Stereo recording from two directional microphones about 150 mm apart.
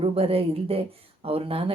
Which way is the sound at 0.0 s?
40° right (ahead or behind).